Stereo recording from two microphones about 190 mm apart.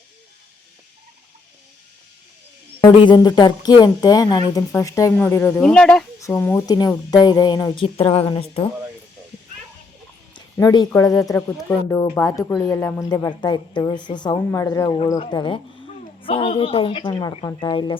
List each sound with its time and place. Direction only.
3.0 s a woman's voice: 25° left (ahead or behind); by 6.1 s 5° left (ahead or behind)
6.1 s a woman's voice: 15° left (ahead or behind)
10.3 s a woman's voice: 20° left (ahead or behind)